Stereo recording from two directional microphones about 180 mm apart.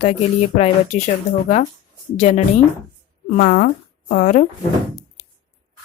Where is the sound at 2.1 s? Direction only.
40° left (ahead or behind).